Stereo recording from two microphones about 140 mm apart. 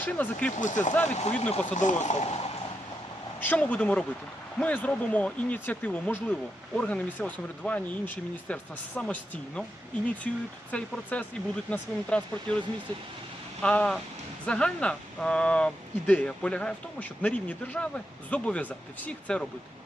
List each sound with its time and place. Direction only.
0.0 s speech: 10° left (ahead or behind)
0.6 s speech: 65° left (ahead or behind)
3.4 s speech: 10° left (ahead or behind)
13.6 s speech: 5° left (ahead or behind)